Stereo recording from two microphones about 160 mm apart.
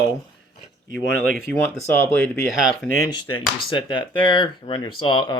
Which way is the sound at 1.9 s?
15° left (ahead or behind).